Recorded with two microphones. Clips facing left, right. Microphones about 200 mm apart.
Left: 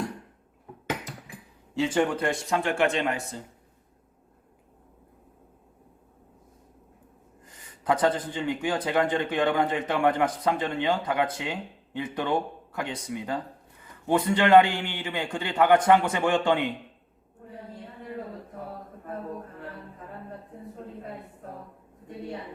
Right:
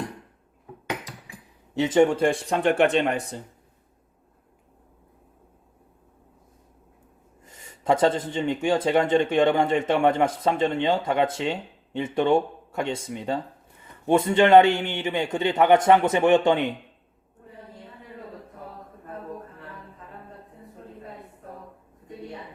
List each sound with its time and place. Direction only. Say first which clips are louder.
1.7 s speech: right 5 dB; 20° right (ahead or behind)
2.6 s speech: right 7 dB; 60° right (ahead or behind)
7.9 s speech: right 3 dB; 25° right (ahead or behind)